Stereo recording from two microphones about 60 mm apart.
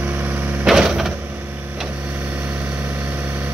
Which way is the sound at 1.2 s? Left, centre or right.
Right.